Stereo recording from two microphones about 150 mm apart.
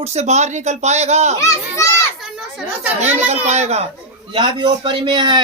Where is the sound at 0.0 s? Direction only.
45° right (ahead or behind).